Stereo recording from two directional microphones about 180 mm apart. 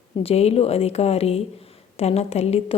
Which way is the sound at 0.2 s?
35° left (ahead or behind).